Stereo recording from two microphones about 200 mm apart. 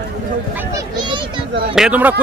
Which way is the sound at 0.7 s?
20° right (ahead or behind).